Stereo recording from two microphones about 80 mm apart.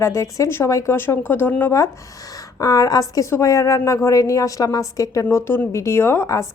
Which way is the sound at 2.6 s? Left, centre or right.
Left.